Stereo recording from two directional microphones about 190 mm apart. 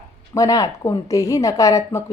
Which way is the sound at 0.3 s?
20° left (ahead or behind).